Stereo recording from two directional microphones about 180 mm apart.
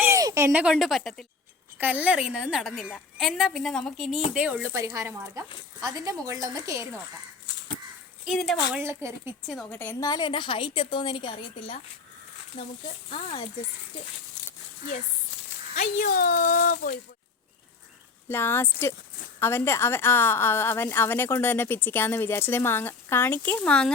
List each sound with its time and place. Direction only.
0.0 s a sound: 15° right (ahead or behind)
0.6 s a woman's voice: centre (ahead or behind); by 6.8 s 20° right (ahead or behind)
8.2 s a woman's voice: centre (ahead or behind)
8.8 s speech: 15° right (ahead or behind)
9.6 s a woman's voice: 10° left (ahead or behind); by 13.5 s 35° left (ahead or behind)
15.7 s speech: 45° left (ahead or behind)
18.3 s a woman's voice: 10° left (ahead or behind)